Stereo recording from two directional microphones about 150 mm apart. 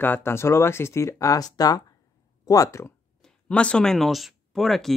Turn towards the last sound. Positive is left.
turn(degrees=0)  # may be behind; listen again after turning